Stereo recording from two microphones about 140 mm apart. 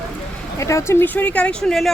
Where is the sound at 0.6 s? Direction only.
20° left (ahead or behind); by 1.9 s 5° left (ahead or behind).